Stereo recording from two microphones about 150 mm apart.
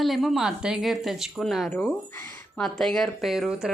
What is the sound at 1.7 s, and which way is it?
Speech, 10° left (ahead or behind).